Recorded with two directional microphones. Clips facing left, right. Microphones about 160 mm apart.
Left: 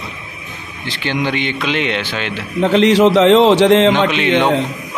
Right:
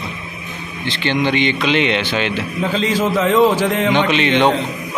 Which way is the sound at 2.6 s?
70° left (ahead or behind).